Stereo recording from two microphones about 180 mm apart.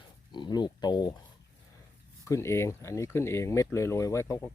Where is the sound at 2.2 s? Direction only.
15° left (ahead or behind).